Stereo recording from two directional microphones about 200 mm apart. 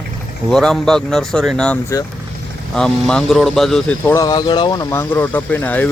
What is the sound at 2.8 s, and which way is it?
Speech, 5° left (ahead or behind).